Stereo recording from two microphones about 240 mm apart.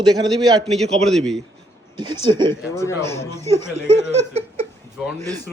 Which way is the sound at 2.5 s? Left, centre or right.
Centre.